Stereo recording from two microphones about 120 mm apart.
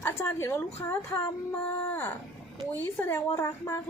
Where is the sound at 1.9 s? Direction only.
20° left (ahead or behind).